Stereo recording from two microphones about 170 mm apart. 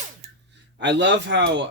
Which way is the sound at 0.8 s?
90° right.